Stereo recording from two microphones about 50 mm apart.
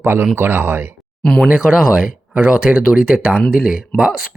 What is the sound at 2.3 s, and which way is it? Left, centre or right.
Speech, right.